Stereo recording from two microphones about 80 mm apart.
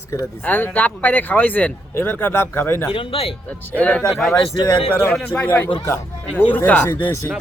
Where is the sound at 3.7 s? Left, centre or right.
Centre.